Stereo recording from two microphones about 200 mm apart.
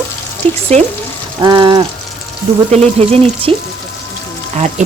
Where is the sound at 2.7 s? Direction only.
35° right (ahead or behind).